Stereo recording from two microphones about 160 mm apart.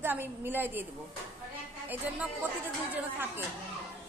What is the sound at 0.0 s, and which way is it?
Speech, 15° right (ahead or behind).